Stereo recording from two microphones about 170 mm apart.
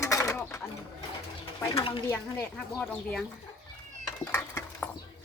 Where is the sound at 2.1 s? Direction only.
10° left (ahead or behind).